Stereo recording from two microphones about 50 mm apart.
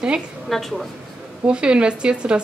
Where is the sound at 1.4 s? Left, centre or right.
Right.